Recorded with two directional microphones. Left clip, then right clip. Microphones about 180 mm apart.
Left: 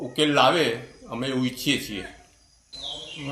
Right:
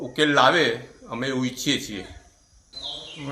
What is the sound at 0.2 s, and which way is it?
A man's voice, centre (ahead or behind).